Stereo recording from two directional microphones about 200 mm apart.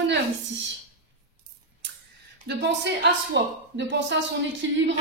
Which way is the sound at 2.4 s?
60° right (ahead or behind).